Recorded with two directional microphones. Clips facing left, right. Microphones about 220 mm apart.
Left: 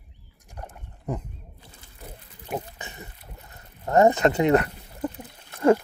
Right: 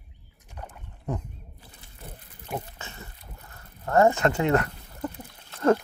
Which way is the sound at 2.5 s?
20° left (ahead or behind).